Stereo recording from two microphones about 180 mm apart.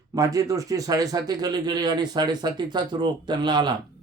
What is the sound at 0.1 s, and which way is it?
Speech, 20° right (ahead or behind).